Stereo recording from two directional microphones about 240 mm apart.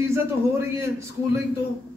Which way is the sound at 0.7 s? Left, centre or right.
Centre.